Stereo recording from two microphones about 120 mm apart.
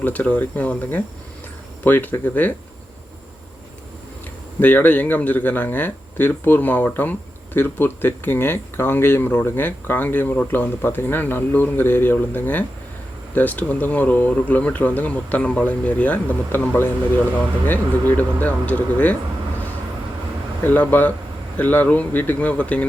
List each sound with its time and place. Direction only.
0.0 s speech: 15° left (ahead or behind)
4.6 s speech: 15° left (ahead or behind)
18.1 s speech: 15° left (ahead or behind)
20.7 s speech: 15° left (ahead or behind)